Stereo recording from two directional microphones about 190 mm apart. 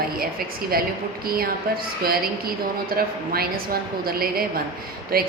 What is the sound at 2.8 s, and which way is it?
A woman's voice, 50° right (ahead or behind).